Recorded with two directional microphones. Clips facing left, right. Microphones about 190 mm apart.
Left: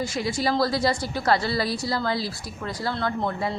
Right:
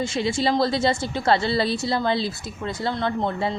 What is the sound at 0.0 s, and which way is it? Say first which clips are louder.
A woman's voice: right 3 dB; 25° right (ahead or behind).